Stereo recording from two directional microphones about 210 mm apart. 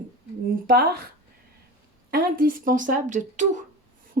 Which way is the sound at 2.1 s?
45° right (ahead or behind).